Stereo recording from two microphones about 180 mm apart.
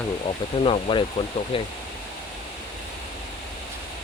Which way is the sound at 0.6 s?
30° left (ahead or behind).